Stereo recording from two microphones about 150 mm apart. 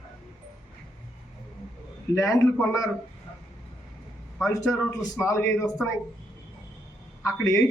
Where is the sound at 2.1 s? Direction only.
20° left (ahead or behind).